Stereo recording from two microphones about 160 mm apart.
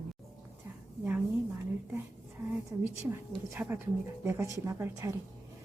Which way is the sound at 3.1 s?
10° right (ahead or behind).